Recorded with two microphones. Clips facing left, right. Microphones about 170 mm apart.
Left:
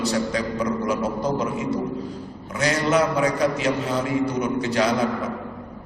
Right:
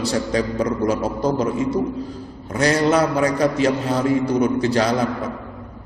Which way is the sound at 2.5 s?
40° right (ahead or behind).